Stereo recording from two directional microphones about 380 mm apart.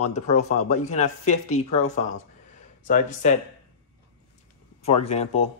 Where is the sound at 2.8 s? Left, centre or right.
Centre.